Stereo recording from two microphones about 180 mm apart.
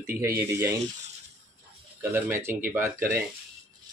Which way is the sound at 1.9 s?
10° right (ahead or behind).